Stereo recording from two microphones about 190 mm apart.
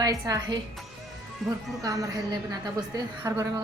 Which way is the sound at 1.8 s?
15° right (ahead or behind).